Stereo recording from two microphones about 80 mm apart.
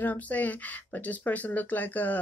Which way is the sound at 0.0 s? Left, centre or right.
Left.